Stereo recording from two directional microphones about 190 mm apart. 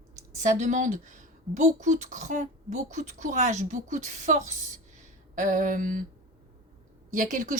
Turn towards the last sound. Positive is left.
turn(degrees=-45)  # may be behind; listen again after turning